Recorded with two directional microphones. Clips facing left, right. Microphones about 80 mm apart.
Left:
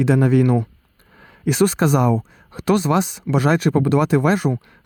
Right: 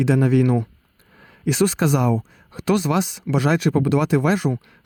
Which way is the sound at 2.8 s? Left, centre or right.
Left.